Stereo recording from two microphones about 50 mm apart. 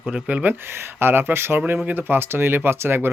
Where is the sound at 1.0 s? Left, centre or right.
Right.